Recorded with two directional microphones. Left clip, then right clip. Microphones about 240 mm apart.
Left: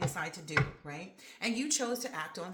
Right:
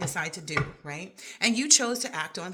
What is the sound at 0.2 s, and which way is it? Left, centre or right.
Speech, right.